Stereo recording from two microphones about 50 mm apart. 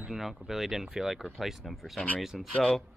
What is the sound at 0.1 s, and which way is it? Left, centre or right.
Speech, centre.